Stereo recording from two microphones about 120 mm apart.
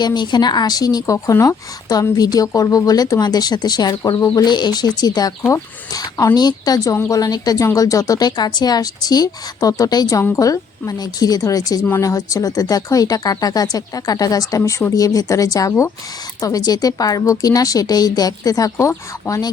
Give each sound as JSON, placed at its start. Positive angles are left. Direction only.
{"t": 0.0, "sound": "a woman's voice", "side_deg": 35}